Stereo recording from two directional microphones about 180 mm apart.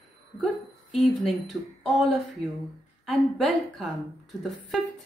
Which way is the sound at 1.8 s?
5° left (ahead or behind).